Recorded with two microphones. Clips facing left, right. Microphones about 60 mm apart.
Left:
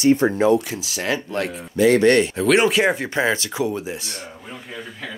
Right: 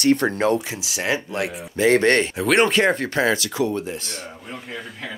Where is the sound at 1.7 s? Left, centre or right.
Right.